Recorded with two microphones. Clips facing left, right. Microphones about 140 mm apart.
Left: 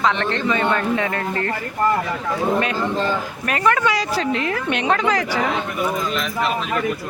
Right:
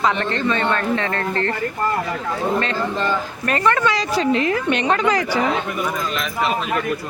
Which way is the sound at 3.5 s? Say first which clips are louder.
Even; 5° left (ahead or behind).